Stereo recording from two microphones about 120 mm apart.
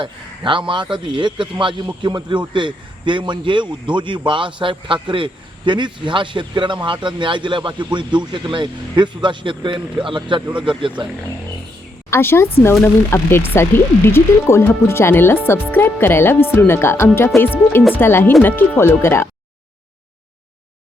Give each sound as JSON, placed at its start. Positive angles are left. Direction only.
{"t": 0.0, "sound": "a man's voice", "side_deg": -45}
{"t": 12.1, "sound": "speech", "side_deg": 20}